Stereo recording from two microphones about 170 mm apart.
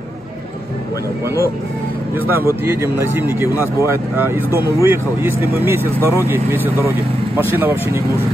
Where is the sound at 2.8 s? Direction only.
15° right (ahead or behind).